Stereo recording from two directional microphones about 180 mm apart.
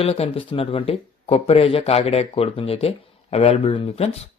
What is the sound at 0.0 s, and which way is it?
Speech, 35° left (ahead or behind).